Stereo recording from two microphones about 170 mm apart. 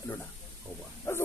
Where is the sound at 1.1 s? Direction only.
15° left (ahead or behind).